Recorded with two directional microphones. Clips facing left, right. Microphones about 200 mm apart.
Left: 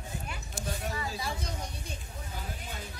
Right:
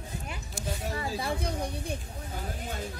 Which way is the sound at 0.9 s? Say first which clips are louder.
Right 4 dB; 50° right (ahead or behind).